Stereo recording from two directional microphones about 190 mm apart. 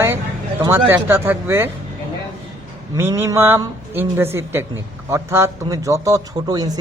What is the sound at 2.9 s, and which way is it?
Speech, 15° right (ahead or behind).